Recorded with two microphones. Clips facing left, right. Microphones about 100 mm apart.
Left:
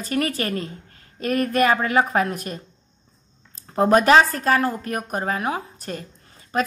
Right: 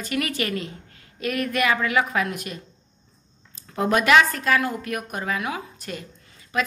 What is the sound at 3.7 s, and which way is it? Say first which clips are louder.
A woman's voice: left 4 dB; 35° left (ahead or behind).